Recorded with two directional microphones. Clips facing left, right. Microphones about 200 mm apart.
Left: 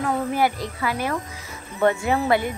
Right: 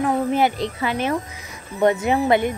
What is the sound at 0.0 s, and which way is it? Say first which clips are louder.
A child's voice: right 3 dB; 25° right (ahead or behind).